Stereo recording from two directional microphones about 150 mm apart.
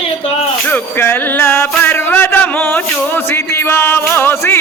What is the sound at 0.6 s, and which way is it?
Music, 15° left (ahead or behind).